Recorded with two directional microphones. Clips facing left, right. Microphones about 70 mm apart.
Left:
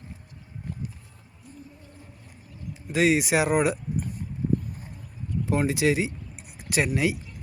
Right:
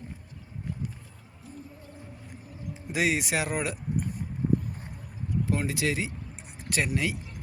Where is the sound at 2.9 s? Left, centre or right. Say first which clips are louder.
Left 6 dB; centre.